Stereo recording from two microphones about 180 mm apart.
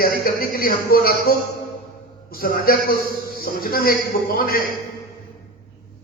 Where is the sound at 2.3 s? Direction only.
55° left (ahead or behind).